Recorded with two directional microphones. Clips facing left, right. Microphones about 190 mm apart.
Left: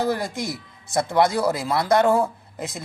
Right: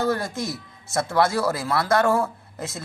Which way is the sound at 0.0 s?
15° left (ahead or behind).